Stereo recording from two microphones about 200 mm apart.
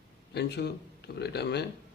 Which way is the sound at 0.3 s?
55° left (ahead or behind).